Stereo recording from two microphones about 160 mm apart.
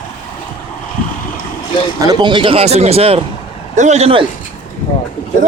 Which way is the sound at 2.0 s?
25° right (ahead or behind).